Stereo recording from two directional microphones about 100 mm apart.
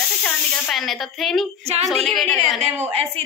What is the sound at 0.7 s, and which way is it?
Speech, centre (ahead or behind).